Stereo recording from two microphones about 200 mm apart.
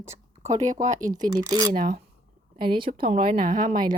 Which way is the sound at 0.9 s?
20° right (ahead or behind).